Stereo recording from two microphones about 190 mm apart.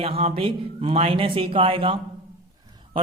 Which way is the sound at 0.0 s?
30° right (ahead or behind).